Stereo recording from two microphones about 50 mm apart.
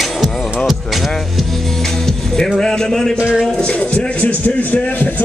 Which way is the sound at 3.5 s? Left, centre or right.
Left.